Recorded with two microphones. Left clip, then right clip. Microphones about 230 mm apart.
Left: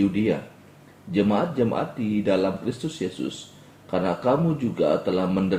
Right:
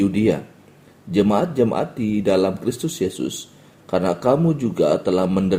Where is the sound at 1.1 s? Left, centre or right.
Right.